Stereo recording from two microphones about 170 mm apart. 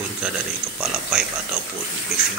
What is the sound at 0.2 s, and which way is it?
A man's voice, 5° right (ahead or behind).